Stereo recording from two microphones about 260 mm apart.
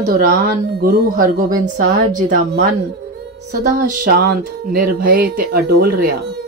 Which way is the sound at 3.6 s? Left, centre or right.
Right.